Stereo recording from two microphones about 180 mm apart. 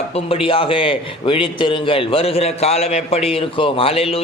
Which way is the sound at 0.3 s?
30° left (ahead or behind).